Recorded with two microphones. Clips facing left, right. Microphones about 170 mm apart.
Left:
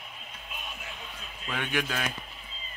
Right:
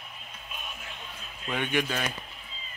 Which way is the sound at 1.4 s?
Centre (ahead or behind).